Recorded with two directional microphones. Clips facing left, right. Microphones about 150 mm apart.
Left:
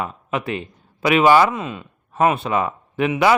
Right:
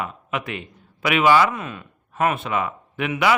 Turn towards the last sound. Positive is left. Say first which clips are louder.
# left 5 dB
turn(degrees=30)  # may be behind; listen again after turning